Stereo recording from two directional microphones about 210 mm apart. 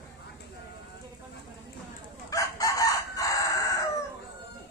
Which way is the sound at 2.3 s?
15° left (ahead or behind).